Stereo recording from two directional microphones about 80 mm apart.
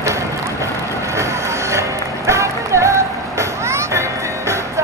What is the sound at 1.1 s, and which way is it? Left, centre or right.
Music, right.